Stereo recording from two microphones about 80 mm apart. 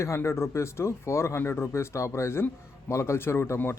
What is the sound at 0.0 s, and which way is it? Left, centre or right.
Speech, left.